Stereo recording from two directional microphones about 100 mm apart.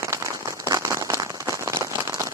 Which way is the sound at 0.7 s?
35° right (ahead or behind).